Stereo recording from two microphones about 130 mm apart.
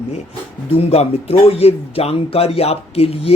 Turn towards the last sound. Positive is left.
turn(degrees=50)  # may be behind; listen again after turning